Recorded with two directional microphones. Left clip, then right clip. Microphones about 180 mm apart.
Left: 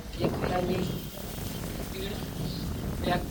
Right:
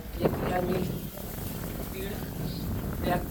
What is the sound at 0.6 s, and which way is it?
Speech, centre (ahead or behind).